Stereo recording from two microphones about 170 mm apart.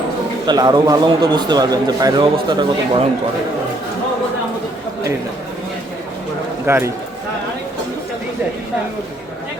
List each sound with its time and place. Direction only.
0.4 s a man's voice: 25° right (ahead or behind)
6.7 s a man's voice: 15° right (ahead or behind)